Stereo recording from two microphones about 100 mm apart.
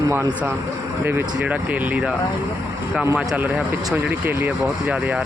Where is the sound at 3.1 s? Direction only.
15° right (ahead or behind).